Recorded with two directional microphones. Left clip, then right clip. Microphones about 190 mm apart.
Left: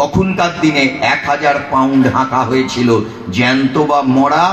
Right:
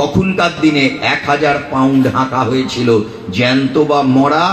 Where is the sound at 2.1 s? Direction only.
55° left (ahead or behind).